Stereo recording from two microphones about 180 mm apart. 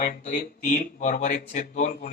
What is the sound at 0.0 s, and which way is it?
Speech, 45° left (ahead or behind).